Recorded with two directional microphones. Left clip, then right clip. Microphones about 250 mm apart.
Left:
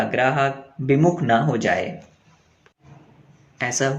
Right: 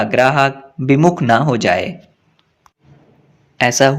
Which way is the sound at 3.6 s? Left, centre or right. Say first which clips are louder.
Right 10 dB; right.